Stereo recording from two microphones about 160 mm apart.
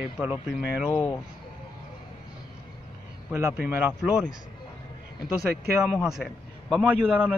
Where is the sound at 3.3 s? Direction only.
15° right (ahead or behind).